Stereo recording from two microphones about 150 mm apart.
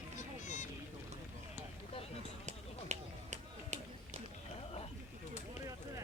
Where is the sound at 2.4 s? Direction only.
50° right (ahead or behind).